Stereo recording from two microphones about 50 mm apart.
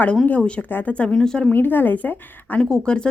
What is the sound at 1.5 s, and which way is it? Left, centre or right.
Speech, left.